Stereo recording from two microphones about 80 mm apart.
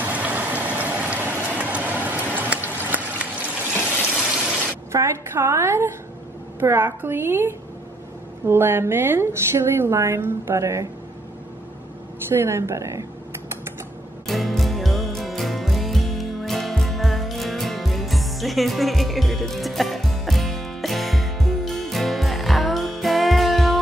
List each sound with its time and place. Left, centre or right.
0.0 s vehicle: centre
4.9 s a sound: right
6.6 s a woman's voice: right
12.3 s a woman's voice: right
14.2 s music: centre